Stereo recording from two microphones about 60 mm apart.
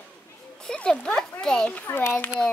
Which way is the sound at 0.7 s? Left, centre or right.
Centre.